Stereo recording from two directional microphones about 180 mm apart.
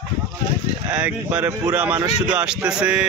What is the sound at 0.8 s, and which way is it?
Speech, 5° right (ahead or behind).